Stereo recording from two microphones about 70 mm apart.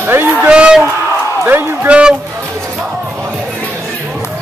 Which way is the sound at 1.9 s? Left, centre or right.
Centre.